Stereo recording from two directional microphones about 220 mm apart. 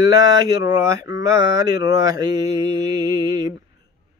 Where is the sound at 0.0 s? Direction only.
15° right (ahead or behind).